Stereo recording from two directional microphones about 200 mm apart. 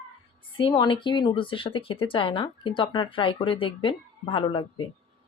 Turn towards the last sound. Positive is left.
turn(degrees=25)  # may be behind; listen again after turning